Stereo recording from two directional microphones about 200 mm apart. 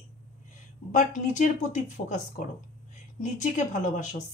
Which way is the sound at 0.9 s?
40° left (ahead or behind).